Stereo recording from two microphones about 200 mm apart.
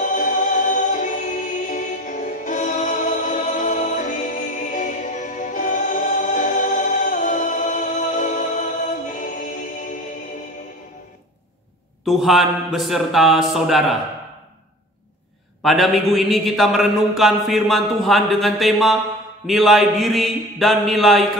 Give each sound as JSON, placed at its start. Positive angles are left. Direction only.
{"t": 0.0, "sound": "music", "side_deg": 40}
{"t": 12.0, "sound": "a man's voice", "side_deg": 0}
{"t": 15.6, "sound": "a man's voice", "side_deg": 0}